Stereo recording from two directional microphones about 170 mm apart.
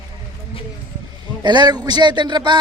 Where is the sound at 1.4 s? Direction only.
25° right (ahead or behind).